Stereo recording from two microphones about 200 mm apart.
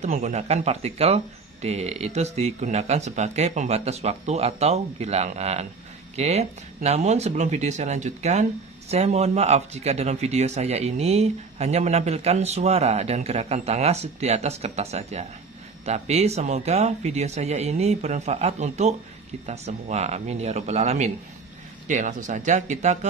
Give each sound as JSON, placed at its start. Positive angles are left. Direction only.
{"t": 0.0, "sound": "speech", "side_deg": -35}